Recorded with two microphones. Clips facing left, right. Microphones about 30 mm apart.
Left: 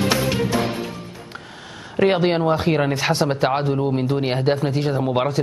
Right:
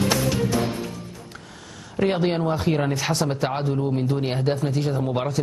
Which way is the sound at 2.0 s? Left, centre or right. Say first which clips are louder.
Left 4 dB; left.